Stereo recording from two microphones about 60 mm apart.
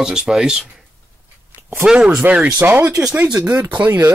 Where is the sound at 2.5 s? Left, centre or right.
Right.